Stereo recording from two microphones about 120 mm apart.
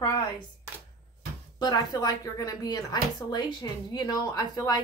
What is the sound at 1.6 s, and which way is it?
A woman's voice, 35° left (ahead or behind).